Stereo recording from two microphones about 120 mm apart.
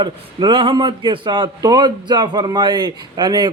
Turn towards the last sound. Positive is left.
turn(degrees=-35)  # may be behind; listen again after turning